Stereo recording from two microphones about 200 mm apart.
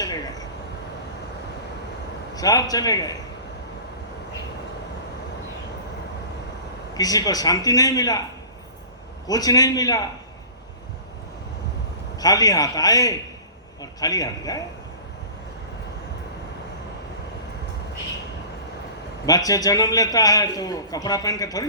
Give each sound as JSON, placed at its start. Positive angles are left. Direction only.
{"t": 0.0, "sound": "vehicle", "side_deg": 20}
{"t": 2.3, "sound": "a man's voice", "side_deg": 20}
{"t": 6.9, "sound": "a man's voice", "side_deg": 20}
{"t": 9.2, "sound": "a man's voice", "side_deg": 20}
{"t": 12.2, "sound": "a man's voice", "side_deg": 20}
{"t": 19.2, "sound": "a man's voice", "side_deg": 20}